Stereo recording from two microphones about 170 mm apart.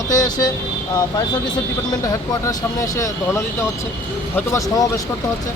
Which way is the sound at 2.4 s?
20° left (ahead or behind).